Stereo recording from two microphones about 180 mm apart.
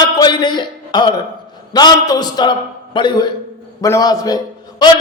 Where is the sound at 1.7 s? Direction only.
25° left (ahead or behind).